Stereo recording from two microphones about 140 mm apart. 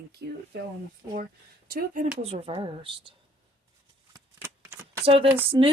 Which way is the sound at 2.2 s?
45° right (ahead or behind).